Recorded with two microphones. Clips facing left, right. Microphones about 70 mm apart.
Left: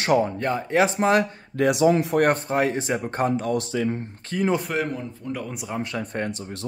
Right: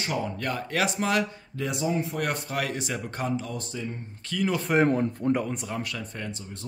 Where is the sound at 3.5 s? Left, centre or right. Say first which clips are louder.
Left 10 dB; left.